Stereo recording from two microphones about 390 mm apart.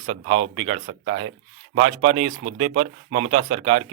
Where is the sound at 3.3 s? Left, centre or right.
Centre.